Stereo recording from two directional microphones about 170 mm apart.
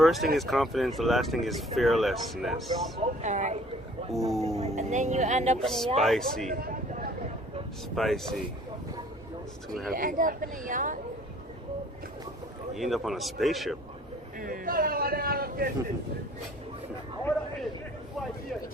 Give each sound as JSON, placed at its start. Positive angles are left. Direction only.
{"t": 0.0, "sound": "speech", "side_deg": 0}
{"t": 3.0, "sound": "speech", "side_deg": -45}
{"t": 5.6, "sound": "speech", "side_deg": 0}
{"t": 6.5, "sound": "a sound", "side_deg": -60}
{"t": 7.9, "sound": "speech", "side_deg": 0}
{"t": 9.6, "sound": "speech", "side_deg": 0}
{"t": 9.9, "sound": "speech", "side_deg": -55}
{"t": 12.7, "sound": "speech", "side_deg": 0}
{"t": 14.3, "sound": "a man's voice", "side_deg": -55}